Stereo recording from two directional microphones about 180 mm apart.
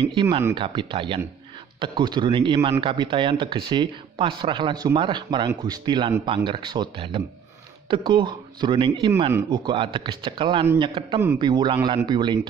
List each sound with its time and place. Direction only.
0.1 s speech: 25° right (ahead or behind)